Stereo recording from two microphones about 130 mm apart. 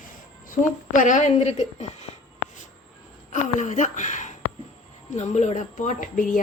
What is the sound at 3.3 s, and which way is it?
A woman's voice, 70° left (ahead or behind).